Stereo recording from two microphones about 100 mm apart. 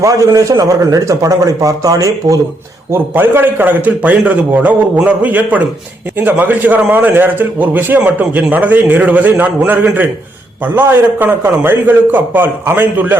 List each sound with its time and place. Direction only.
0.0 s a man's voice: 35° right (ahead or behind)
2.9 s a man's voice: 20° right (ahead or behind)